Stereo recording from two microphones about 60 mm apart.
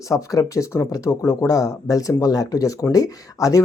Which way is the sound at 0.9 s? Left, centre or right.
Left.